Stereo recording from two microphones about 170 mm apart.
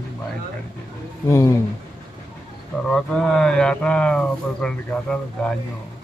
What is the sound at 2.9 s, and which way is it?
Speech, 5° left (ahead or behind).